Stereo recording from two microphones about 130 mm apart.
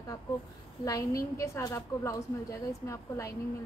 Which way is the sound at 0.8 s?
25° left (ahead or behind).